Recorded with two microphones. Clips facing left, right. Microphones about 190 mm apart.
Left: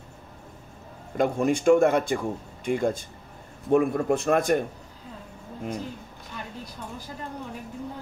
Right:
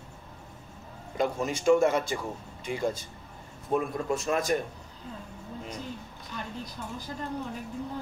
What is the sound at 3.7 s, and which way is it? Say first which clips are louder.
Speech: left 7 dB; 65° left (ahead or behind).